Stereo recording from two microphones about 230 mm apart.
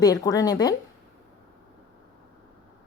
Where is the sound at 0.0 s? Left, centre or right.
Centre.